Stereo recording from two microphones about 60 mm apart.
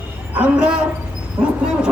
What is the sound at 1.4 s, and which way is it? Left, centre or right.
Speech, right.